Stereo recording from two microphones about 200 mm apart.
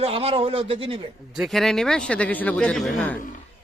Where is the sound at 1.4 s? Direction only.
Centre (ahead or behind).